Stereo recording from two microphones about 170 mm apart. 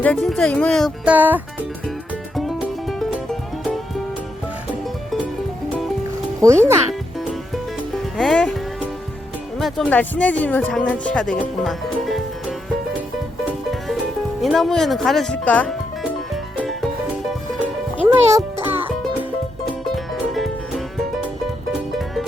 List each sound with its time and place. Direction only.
0.0 s speech: 5° left (ahead or behind)
6.4 s a child's voice: 15° right (ahead or behind)
8.2 s speech: 5° left (ahead or behind)
9.6 s speech: centre (ahead or behind)
14.4 s speech: centre (ahead or behind)
16.6 s music: centre (ahead or behind)
18.0 s music: 10° right (ahead or behind)
20.3 s music: centre (ahead or behind)
21.9 s music: centre (ahead or behind)